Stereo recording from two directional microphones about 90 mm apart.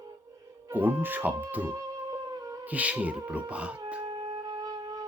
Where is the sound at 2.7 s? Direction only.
15° right (ahead or behind).